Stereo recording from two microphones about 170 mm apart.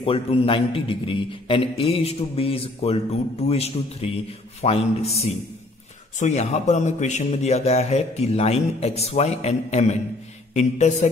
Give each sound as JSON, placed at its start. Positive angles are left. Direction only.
{"t": 0.0, "sound": "a man's voice", "side_deg": 35}